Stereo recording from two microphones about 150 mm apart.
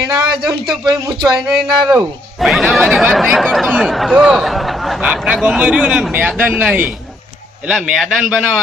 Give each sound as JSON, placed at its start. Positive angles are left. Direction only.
{"t": 0.4, "sound": "a man's voice", "side_deg": 0}
{"t": 0.9, "sound": "speech", "side_deg": -25}
{"t": 1.4, "sound": "a man's voice", "side_deg": -5}